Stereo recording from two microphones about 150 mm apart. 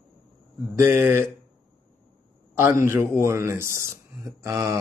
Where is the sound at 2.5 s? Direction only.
15° right (ahead or behind).